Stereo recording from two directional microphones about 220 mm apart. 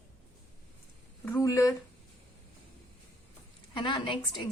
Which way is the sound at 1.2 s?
15° left (ahead or behind).